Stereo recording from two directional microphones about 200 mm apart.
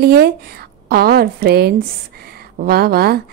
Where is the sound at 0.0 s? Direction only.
50° right (ahead or behind).